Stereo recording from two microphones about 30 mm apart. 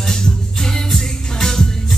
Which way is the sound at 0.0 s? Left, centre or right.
Centre.